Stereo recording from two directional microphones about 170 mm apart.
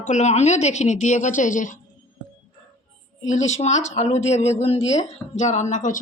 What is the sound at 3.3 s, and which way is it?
Speech, 45° left (ahead or behind).